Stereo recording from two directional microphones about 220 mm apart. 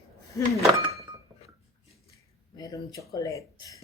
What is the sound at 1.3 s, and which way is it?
Dishes, 20° right (ahead or behind).